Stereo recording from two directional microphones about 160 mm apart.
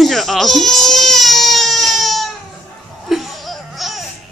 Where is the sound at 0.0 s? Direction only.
Centre (ahead or behind).